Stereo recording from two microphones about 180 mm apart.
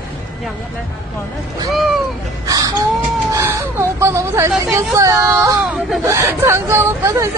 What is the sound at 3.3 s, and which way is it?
Speech, 15° right (ahead or behind).